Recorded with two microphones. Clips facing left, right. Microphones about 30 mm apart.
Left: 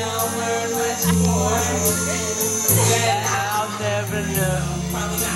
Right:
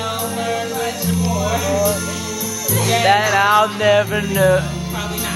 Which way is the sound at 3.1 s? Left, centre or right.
Right.